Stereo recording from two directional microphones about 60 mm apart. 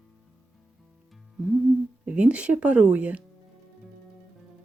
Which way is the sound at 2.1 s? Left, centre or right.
Right.